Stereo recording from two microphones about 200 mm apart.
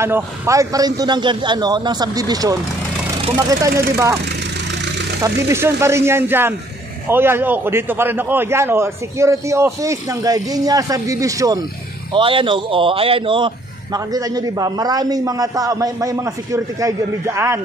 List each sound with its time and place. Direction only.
0.0 s a man's voice: 15° right (ahead or behind)
5.2 s a man's voice: 15° right (ahead or behind)